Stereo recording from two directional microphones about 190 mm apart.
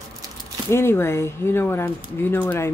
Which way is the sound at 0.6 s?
15° left (ahead or behind).